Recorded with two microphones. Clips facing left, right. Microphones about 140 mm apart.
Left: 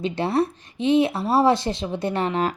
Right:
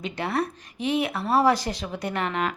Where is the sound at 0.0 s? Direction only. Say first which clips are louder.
Left 5 dB; 30° left (ahead or behind).